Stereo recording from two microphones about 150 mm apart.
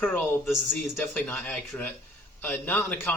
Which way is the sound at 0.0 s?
10° left (ahead or behind).